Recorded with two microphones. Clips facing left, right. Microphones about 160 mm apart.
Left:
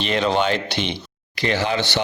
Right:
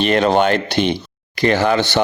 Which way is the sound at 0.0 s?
55° right (ahead or behind).